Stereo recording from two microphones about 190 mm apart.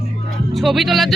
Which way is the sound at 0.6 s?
Centre (ahead or behind).